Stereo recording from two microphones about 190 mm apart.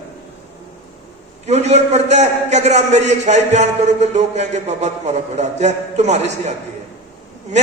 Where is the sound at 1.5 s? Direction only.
35° right (ahead or behind).